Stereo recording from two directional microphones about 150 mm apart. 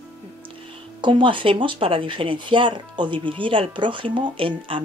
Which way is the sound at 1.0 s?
35° right (ahead or behind).